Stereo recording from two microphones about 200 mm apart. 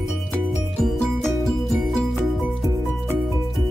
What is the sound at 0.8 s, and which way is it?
Music, 5° left (ahead or behind).